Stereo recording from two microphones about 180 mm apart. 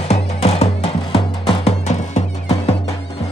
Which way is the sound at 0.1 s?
35° left (ahead or behind).